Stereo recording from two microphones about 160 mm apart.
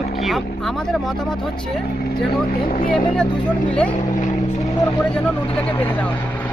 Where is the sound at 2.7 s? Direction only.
60° left (ahead or behind).